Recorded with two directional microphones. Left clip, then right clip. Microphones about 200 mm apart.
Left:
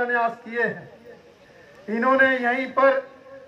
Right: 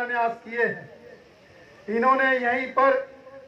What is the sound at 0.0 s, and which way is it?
Speech, 55° left (ahead or behind).